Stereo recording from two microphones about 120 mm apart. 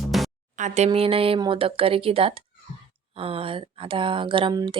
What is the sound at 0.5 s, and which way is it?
Speech, 85° right.